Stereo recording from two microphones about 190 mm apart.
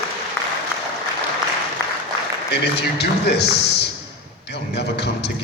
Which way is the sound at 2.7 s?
60° left (ahead or behind).